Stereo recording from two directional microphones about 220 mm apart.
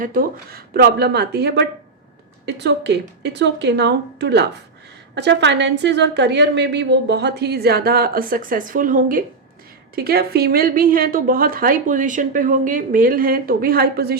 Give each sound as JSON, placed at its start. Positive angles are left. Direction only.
{"t": 0.0, "sound": "a woman's voice", "side_deg": -40}